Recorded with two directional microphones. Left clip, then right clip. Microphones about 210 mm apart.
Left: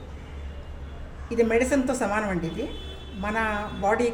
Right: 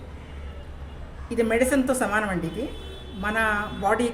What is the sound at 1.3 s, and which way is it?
A woman's voice, 15° right (ahead or behind).